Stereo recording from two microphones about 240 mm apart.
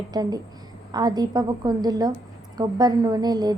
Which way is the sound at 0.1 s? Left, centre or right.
Centre.